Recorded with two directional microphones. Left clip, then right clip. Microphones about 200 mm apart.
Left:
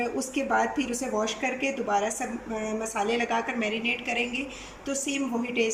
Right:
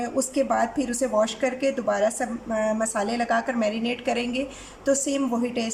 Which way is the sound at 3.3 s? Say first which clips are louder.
Right 4 dB; 35° right (ahead or behind).